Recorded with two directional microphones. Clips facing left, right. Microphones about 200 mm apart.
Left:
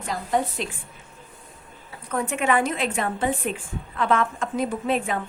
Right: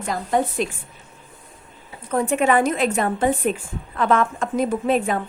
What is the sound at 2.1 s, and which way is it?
A woman's voice, 35° right (ahead or behind).